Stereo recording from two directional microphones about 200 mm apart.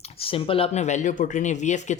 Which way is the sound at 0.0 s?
25° left (ahead or behind).